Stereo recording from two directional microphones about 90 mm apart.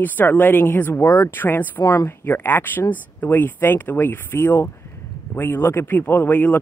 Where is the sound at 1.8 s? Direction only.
40° left (ahead or behind).